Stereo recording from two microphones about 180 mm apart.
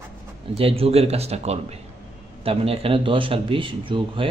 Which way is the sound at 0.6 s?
30° right (ahead or behind).